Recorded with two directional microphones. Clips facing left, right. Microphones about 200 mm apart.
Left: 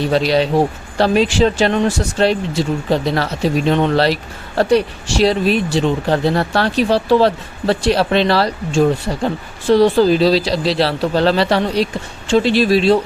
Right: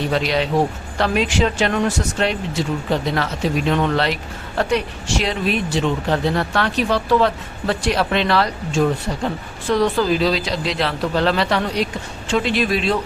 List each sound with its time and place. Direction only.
0.1 s speech: 35° left (ahead or behind)